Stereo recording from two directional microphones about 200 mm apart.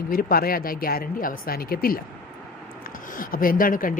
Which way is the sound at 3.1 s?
45° left (ahead or behind).